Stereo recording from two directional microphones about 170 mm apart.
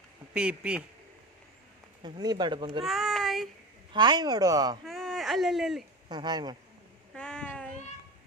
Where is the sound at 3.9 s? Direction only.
25° right (ahead or behind).